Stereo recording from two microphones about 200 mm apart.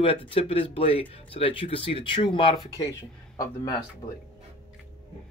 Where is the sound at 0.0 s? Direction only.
25° left (ahead or behind).